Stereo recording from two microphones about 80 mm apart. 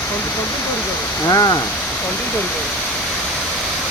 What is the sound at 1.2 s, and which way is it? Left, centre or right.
Speech, left.